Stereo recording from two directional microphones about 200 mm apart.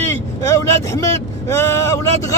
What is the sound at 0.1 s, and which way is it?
Speech, 15° left (ahead or behind).